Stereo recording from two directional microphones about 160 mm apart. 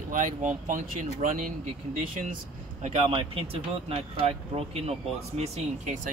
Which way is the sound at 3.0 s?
35° right (ahead or behind).